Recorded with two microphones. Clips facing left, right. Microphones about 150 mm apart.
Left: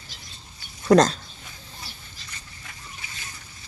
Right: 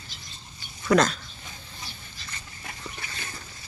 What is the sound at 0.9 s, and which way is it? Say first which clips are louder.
Speech: left 4 dB; 40° left (ahead or behind).